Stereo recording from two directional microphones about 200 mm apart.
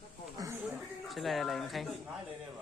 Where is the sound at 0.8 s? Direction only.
Centre (ahead or behind).